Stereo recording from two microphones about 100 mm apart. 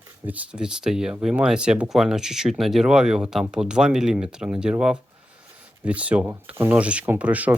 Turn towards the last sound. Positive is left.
turn(degrees=-15)  # may be behind; listen again after turning